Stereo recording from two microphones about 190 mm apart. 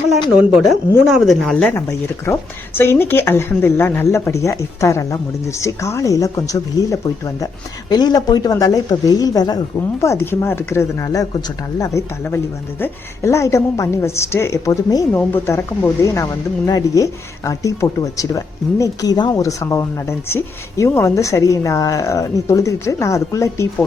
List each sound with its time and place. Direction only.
0.7 s a woman's voice: centre (ahead or behind)
1.7 s speech: 15° left (ahead or behind)